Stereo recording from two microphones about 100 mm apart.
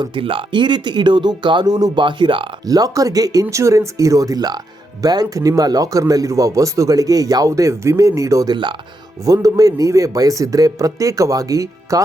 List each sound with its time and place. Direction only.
0.0 s speech: 60° right (ahead or behind)
2.6 s a man's voice: 35° right (ahead or behind)